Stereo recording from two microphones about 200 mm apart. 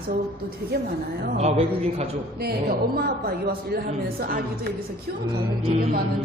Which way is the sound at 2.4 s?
50° right (ahead or behind).